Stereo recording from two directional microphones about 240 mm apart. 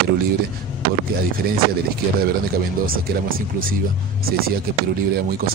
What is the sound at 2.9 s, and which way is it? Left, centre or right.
A man's voice, right.